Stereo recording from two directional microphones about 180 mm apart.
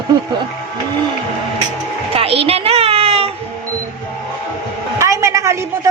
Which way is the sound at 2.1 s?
30° right (ahead or behind).